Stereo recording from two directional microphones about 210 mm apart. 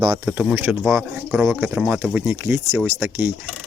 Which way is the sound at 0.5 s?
10° right (ahead or behind).